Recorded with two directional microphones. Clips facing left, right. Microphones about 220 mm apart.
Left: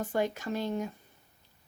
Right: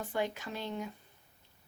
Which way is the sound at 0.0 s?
45° left (ahead or behind).